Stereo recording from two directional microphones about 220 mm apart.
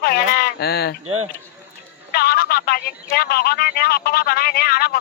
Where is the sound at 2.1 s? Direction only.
45° left (ahead or behind).